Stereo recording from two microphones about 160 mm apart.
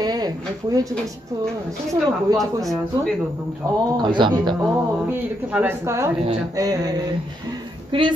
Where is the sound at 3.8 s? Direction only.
30° right (ahead or behind).